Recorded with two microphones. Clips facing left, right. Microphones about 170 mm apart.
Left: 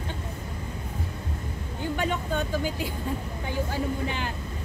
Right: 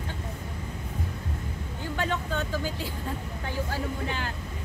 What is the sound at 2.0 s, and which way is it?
Speech, 15° left (ahead or behind).